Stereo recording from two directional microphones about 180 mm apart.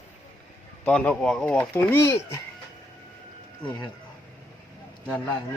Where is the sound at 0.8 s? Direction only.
5° left (ahead or behind).